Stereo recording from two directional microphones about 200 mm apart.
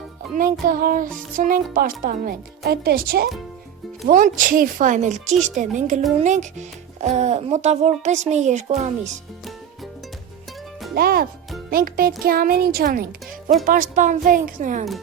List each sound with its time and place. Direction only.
0.7 s a child's voice: 45° right (ahead or behind)
10.9 s a child's voice: 50° right (ahead or behind)